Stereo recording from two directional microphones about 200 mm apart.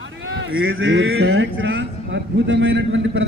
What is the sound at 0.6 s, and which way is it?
A man's voice, 85° right.